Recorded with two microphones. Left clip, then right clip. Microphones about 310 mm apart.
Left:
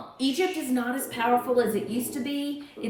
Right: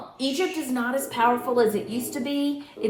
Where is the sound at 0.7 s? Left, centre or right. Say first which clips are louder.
Right 3 dB; centre.